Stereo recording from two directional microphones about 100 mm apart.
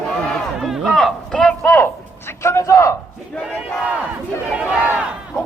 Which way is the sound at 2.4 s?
30° left (ahead or behind).